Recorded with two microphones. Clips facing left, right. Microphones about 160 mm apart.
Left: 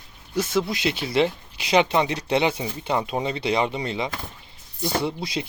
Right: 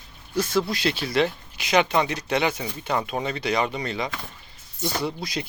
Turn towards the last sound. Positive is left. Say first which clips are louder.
# left 2 dB
turn(degrees=25)  # may be behind; listen again after turning